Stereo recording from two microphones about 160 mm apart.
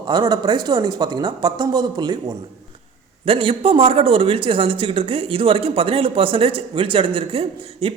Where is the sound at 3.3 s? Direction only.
35° right (ahead or behind).